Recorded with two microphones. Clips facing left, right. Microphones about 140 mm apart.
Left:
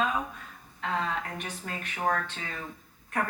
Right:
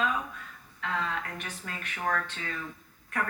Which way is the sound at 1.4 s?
20° left (ahead or behind).